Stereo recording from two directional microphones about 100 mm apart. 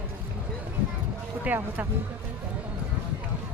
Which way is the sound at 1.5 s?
15° right (ahead or behind).